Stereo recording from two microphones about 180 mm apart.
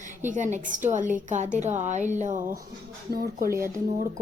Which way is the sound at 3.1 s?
55° right (ahead or behind).